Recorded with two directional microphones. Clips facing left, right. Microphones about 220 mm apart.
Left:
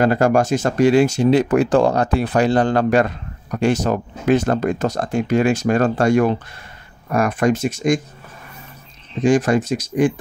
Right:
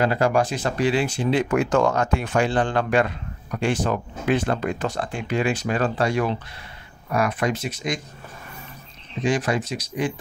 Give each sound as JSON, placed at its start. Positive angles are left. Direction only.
{"t": 0.0, "sound": "speech", "side_deg": 45}
{"t": 9.2, "sound": "speech", "side_deg": 45}